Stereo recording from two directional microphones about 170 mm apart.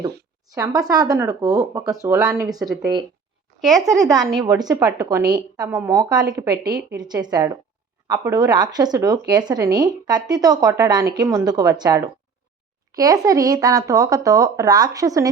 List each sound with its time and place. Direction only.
0.5 s a woman's voice: 20° right (ahead or behind)
3.6 s speech: centre (ahead or behind)
4.4 s a woman's voice: 25° right (ahead or behind)